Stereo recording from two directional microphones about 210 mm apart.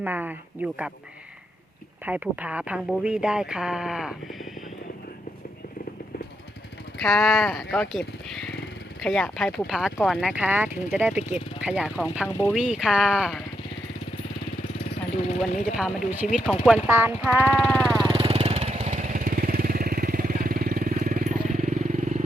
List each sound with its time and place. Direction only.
0.0 s speech: 10° right (ahead or behind)
2.0 s speech: 5° right (ahead or behind)
7.0 s speech: centre (ahead or behind)
15.7 s speech: centre (ahead or behind)
18.0 s vehicle: 25° right (ahead or behind)